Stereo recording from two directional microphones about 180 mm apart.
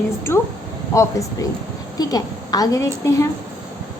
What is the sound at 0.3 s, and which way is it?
A woman's voice, 15° left (ahead or behind).